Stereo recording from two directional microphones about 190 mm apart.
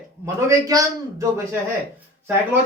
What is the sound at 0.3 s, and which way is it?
Speech, 15° right (ahead or behind).